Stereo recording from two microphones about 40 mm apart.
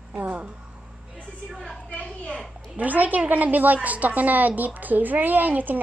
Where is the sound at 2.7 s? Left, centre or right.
Right.